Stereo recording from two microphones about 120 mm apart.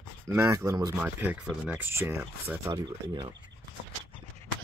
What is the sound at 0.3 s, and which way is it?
Speech, 25° right (ahead or behind).